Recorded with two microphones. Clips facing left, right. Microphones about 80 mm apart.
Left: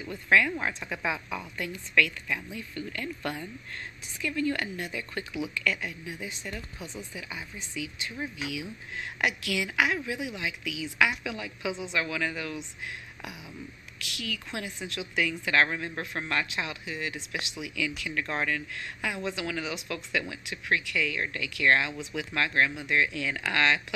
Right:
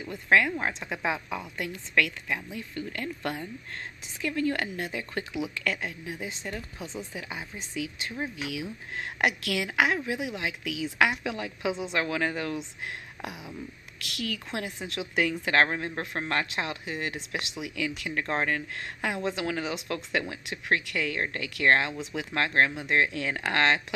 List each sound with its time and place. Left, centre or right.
0.6 s a woman's voice: right
2.0 s speech: right
4.2 s speech: right
6.2 s speech: right